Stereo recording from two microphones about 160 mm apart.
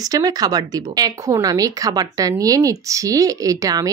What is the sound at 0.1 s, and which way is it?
A woman's voice, 25° right (ahead or behind).